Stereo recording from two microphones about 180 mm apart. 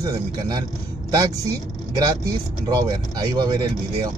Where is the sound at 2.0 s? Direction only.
20° right (ahead or behind).